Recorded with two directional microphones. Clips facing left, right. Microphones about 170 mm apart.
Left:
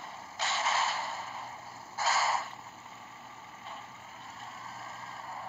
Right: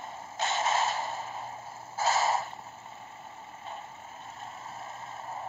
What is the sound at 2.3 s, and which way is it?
Vehicle, 35° right (ahead or behind).